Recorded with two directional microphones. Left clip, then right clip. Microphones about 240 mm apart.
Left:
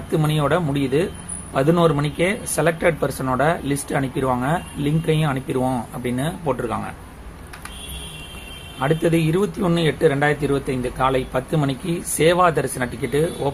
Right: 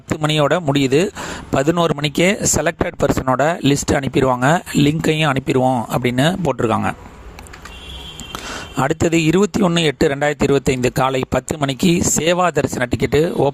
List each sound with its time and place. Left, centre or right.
0.2 s speech: right
8.8 s speech: right